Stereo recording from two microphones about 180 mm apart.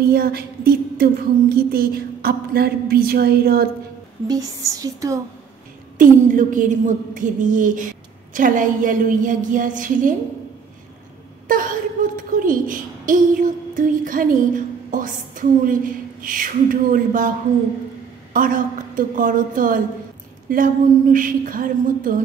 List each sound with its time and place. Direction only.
0.0 s a sound: 60° right (ahead or behind)
4.3 s speech: 20° right (ahead or behind)
5.9 s a woman's voice: 45° right (ahead or behind)
11.4 s a woman's voice: 50° right (ahead or behind)
18.3 s a woman's voice: 50° right (ahead or behind)